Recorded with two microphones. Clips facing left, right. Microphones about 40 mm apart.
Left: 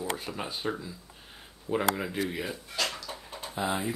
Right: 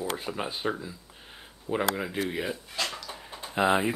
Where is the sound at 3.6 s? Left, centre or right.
Right.